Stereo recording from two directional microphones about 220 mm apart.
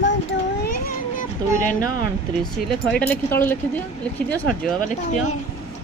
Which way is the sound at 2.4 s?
5° left (ahead or behind).